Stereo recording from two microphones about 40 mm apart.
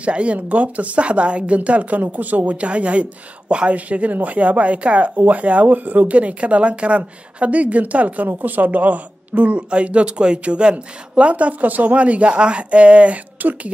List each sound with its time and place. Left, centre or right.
0.0 s speech: right
13.4 s speech: right